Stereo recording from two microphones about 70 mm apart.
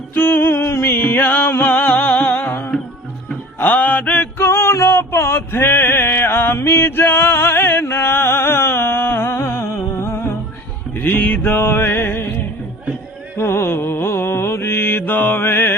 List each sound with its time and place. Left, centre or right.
0.1 s music: left
3.7 s a sound: left
10.9 s music: left
13.3 s mantra: left